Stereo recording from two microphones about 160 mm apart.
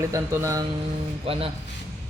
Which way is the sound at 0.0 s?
20° right (ahead or behind).